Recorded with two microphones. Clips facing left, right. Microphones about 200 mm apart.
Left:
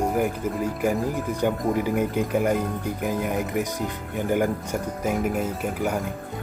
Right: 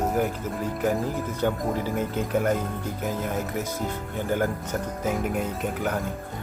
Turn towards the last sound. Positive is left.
turn(degrees=10)  # may be behind; listen again after turning